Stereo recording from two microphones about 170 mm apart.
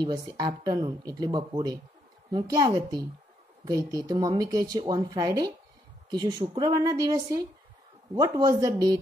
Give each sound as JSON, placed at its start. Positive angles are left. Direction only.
{"t": 0.0, "sound": "speech", "side_deg": -25}